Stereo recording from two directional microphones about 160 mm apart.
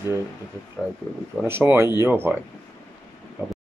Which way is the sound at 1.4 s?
15° right (ahead or behind).